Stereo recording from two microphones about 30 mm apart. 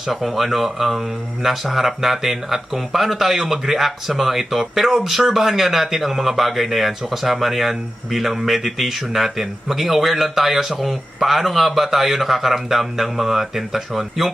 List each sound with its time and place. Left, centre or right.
0.1 s speech: centre